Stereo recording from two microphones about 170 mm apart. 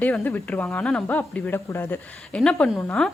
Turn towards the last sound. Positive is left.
turn(degrees=5)  # may be behind; listen again after turning